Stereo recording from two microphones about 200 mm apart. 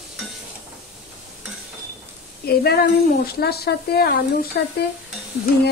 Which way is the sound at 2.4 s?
50° left (ahead or behind).